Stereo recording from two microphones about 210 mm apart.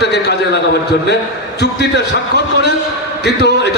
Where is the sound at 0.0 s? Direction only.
55° left (ahead or behind).